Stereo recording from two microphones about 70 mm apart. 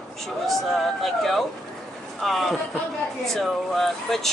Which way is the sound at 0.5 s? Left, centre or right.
Centre.